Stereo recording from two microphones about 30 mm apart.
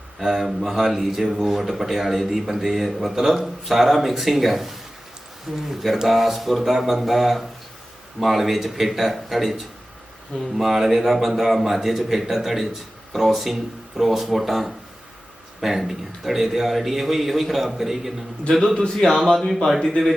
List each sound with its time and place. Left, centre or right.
0.2 s a man's voice: centre
18.6 s a man's voice: left
19.0 s a man's voice: centre